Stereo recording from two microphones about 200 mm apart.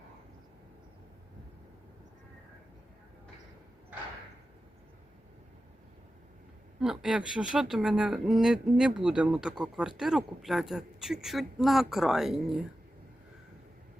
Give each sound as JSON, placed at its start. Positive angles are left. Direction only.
{"t": 6.7, "sound": "speech", "side_deg": -5}